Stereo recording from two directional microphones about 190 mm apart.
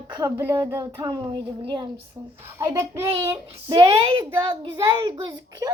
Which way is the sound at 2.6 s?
15° right (ahead or behind).